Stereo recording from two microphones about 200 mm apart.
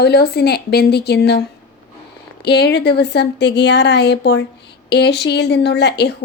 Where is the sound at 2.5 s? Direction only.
55° left (ahead or behind).